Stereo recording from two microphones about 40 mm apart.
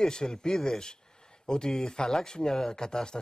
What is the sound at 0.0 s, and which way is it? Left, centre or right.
Speech, centre.